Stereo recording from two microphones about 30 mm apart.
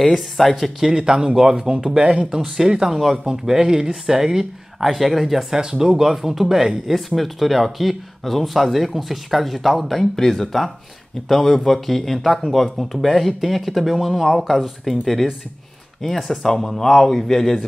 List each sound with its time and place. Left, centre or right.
0.0 s speech: centre
0.9 s speech: right
2.0 s speech: right
2.3 s speech: centre
3.3 s speech: centre
4.8 s speech: centre
5.6 s speech: right; by 10.0 s centre
10.1 s speech: centre
14.2 s speech: centre